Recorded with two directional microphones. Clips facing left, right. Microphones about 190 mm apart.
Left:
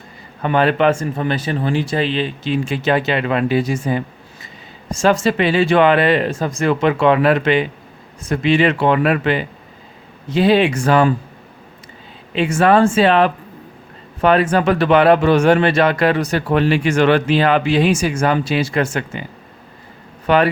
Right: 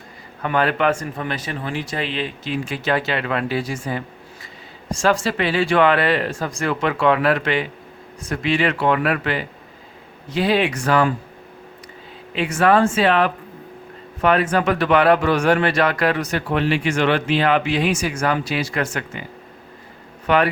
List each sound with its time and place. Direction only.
0.4 s speech: 25° left (ahead or behind)
12.3 s speech: 25° left (ahead or behind)
20.2 s speech: 30° left (ahead or behind)